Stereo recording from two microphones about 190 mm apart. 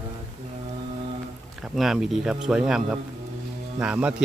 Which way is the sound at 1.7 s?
Centre (ahead or behind).